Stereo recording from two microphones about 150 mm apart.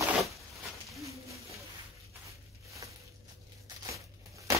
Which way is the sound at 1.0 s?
20° right (ahead or behind).